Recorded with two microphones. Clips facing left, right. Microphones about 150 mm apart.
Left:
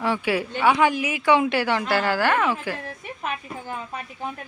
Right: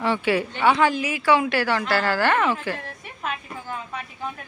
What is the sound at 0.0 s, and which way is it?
A woman's voice, 5° left (ahead or behind).